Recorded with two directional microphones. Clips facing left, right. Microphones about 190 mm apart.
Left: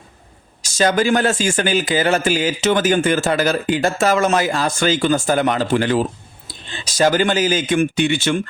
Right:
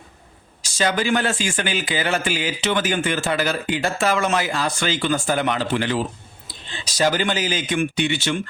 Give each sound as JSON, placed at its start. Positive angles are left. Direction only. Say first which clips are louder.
{"t": 0.6, "sound": "speech", "louder": "left 5 dB", "side_deg": 45}